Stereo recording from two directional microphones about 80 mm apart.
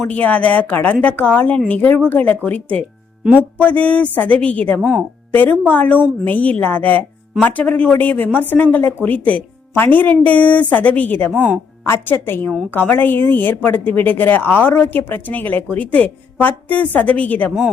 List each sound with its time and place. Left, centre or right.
0.1 s speech: centre